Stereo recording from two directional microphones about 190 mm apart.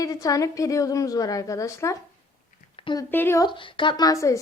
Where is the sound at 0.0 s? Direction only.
20° left (ahead or behind).